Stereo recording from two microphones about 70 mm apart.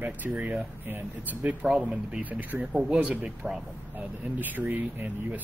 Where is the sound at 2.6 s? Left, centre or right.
Centre.